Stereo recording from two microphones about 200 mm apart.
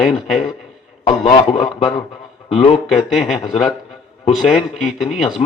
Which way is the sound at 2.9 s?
Centre (ahead or behind).